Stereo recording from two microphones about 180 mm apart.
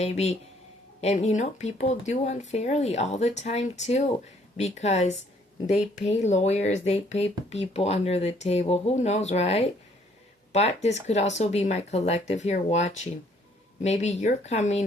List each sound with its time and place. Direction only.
0.0 s speech: 40° left (ahead or behind)